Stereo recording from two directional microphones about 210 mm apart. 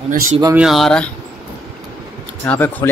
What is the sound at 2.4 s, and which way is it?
Speech, 10° left (ahead or behind).